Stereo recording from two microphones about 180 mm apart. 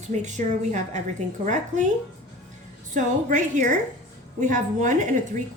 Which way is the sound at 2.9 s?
45° right (ahead or behind).